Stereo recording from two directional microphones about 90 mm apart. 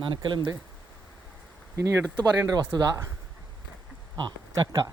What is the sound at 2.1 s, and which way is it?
Speech, 50° right (ahead or behind).